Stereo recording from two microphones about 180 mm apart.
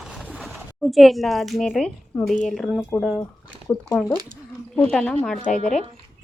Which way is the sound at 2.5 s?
Centre (ahead or behind).